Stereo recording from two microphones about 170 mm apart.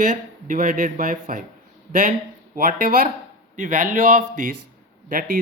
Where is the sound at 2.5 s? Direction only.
55° right (ahead or behind).